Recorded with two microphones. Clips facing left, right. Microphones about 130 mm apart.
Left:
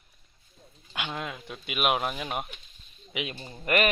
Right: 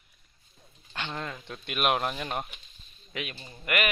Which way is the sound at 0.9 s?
5° left (ahead or behind).